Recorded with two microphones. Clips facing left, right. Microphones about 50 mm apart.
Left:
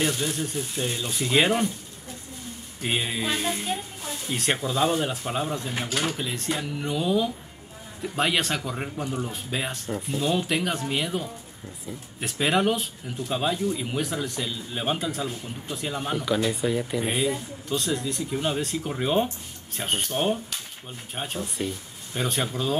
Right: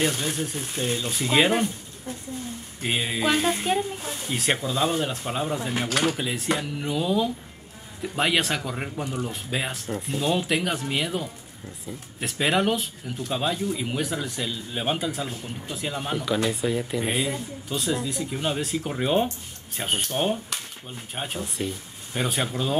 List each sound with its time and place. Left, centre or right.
0.3 s speech: centre
2.8 s speech: centre
3.3 s a woman's voice: right
4.3 s speech: centre